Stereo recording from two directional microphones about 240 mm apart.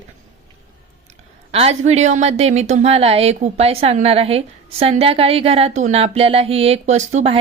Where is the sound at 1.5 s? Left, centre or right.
Right.